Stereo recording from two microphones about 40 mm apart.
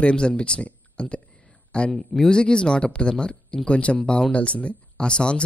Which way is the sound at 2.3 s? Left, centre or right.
Left.